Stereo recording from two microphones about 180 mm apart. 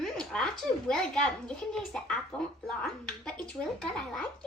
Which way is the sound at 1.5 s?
5° left (ahead or behind).